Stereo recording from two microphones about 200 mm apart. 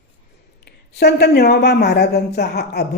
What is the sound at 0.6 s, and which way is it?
Speech, 55° left (ahead or behind).